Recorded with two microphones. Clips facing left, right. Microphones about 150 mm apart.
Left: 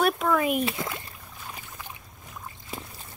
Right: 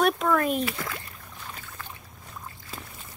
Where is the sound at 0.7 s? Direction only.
20° left (ahead or behind).